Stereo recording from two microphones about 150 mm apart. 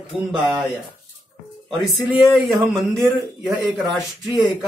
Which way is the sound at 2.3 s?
Centre (ahead or behind).